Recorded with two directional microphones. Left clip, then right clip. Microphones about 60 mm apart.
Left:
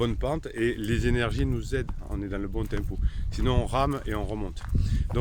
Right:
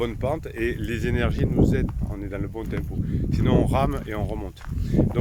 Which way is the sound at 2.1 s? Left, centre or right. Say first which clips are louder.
Right 1 dB; left.